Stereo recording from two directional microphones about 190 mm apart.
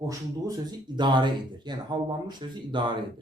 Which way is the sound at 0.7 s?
20° right (ahead or behind).